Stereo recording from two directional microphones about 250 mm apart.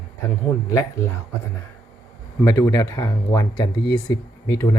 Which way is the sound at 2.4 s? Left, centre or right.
Centre.